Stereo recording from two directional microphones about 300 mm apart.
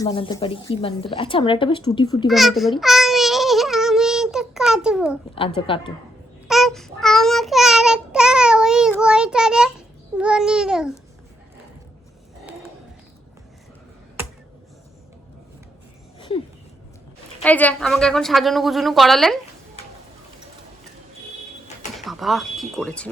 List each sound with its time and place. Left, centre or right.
0.0 s speech: centre
2.2 s a woman's voice: centre
2.8 s child singing: centre
5.5 s speech: centre
6.5 s child singing: centre
10.2 s babbling: centre
17.4 s a woman's voice: centre
21.8 s a sound: centre